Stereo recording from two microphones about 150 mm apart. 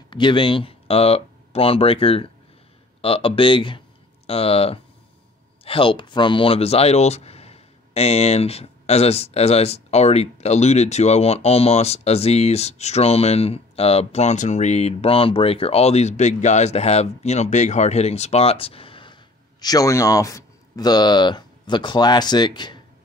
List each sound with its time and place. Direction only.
0.1 s speech: 35° left (ahead or behind)
19.6 s speech: 25° left (ahead or behind)